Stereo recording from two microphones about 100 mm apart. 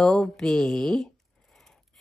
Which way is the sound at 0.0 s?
5° left (ahead or behind).